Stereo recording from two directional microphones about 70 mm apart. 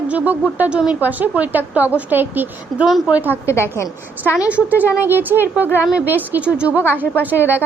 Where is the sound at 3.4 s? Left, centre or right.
Left.